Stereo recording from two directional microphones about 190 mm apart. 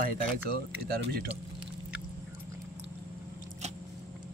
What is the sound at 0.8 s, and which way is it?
Speech, 55° right (ahead or behind).